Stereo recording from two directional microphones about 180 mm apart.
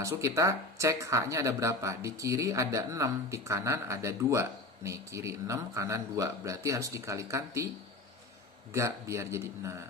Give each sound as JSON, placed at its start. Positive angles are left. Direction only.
{"t": 0.0, "sound": "speech", "side_deg": -15}
{"t": 8.7, "sound": "speech", "side_deg": -15}